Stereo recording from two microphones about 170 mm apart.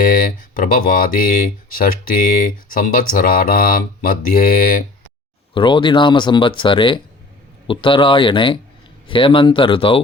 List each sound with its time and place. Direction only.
0.0 s speech: 55° left (ahead or behind)
5.5 s speech: 30° left (ahead or behind)